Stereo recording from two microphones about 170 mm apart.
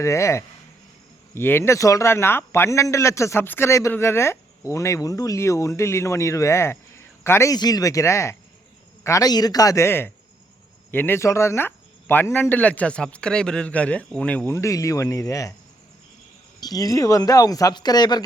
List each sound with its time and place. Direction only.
0.0 s speech: 15° left (ahead or behind)
16.6 s speech: 20° left (ahead or behind)